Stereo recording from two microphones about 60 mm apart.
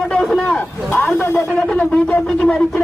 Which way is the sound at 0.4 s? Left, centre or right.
Left.